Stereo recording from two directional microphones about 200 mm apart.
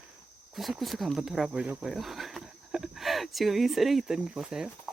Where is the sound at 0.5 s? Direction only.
Centre (ahead or behind).